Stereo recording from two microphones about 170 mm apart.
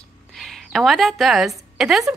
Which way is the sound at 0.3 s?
Centre (ahead or behind).